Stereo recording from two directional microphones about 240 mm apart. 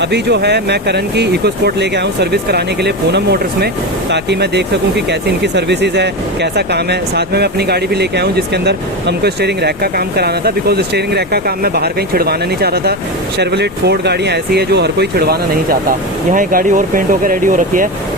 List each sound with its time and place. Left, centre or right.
0.0 s speech: right